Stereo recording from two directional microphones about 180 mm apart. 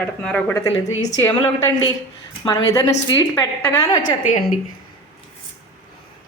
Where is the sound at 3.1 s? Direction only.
25° left (ahead or behind).